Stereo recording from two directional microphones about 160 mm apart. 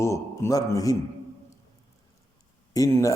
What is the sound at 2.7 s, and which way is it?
Speech, 20° left (ahead or behind).